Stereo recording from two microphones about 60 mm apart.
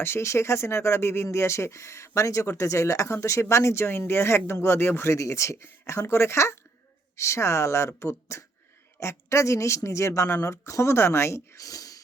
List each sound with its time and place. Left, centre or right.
0.0 s speech: left